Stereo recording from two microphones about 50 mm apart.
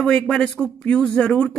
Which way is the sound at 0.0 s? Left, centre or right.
Centre.